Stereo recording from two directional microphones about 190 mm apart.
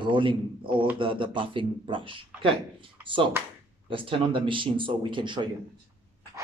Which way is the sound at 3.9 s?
25° right (ahead or behind).